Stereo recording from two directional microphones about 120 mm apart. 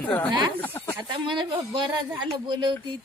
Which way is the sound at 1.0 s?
40° right (ahead or behind).